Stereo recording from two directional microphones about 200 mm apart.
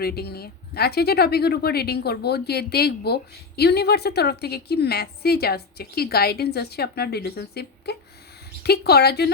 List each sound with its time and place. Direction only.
0.0 s speech: 50° left (ahead or behind)